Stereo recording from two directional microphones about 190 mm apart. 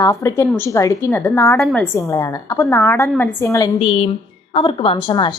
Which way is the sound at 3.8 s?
30° left (ahead or behind).